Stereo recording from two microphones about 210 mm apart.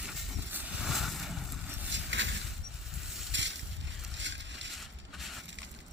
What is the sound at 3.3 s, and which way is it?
Vehicle, 60° right (ahead or behind).